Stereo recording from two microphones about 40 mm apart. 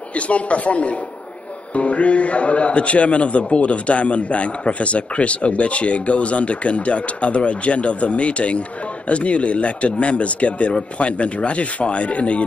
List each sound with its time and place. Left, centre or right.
0.1 s a man's voice: left